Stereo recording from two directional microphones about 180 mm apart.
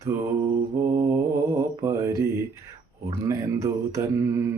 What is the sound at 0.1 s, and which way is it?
Mantra, 10° right (ahead or behind).